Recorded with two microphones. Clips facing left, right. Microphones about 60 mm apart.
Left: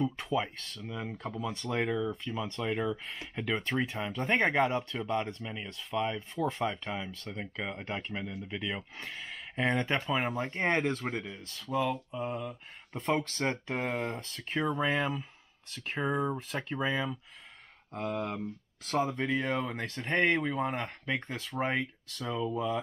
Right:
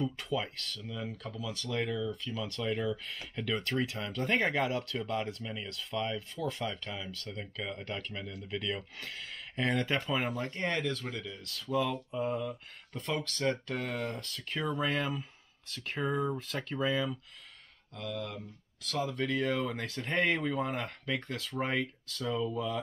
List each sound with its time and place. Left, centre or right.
0.0 s speech: centre
0.9 s speech: left; by 5.3 s centre
5.4 s speech: centre
6.7 s speech: left
10.3 s speech: left
11.3 s speech: centre
12.9 s speech: centre
14.8 s speech: centre
16.0 s speech: centre
17.9 s speech: left
19.1 s speech: centre